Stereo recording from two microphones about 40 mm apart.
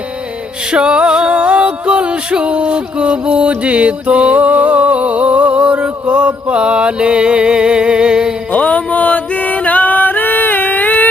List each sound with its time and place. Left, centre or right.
0.7 s music: right
8.5 s music: left